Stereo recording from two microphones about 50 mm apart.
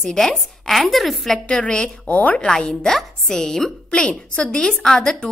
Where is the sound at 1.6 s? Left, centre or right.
Centre.